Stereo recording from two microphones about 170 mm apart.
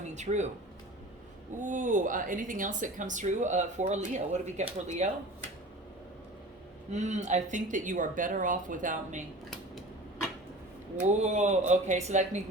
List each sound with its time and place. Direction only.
0.0 s speech: 45° right (ahead or behind)
1.6 s speech: 50° right (ahead or behind)
6.9 s speech: 45° right (ahead or behind)
11.0 s speech: 45° right (ahead or behind)